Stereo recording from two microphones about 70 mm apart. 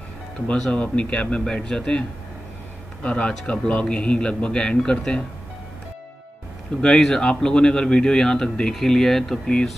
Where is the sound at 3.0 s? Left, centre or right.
Centre.